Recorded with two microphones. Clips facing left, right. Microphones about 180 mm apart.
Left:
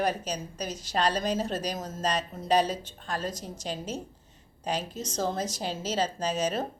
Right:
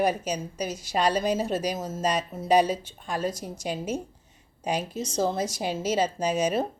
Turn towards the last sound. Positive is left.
turn(degrees=-10)  # may be behind; listen again after turning